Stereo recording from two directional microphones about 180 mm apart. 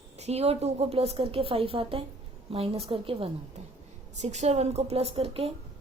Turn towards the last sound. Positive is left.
turn(degrees=-30)  # may be behind; listen again after turning